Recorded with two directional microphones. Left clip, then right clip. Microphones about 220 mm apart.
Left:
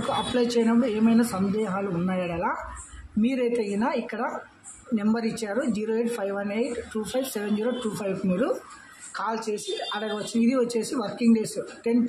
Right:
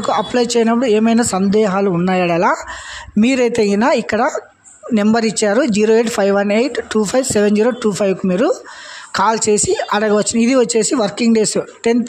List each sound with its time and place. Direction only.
0.1 s speech: 40° right (ahead or behind)